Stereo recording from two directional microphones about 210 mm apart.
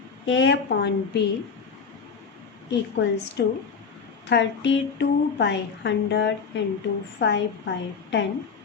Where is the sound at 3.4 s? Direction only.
55° left (ahead or behind).